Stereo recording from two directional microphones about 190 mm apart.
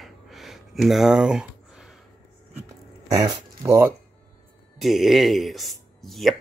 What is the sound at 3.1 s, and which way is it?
Speech, 20° right (ahead or behind).